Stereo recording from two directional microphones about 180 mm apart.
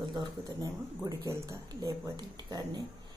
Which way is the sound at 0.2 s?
20° right (ahead or behind).